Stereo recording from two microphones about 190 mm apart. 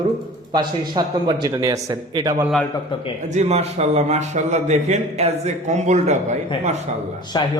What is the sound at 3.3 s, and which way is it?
A man's voice, 35° right (ahead or behind).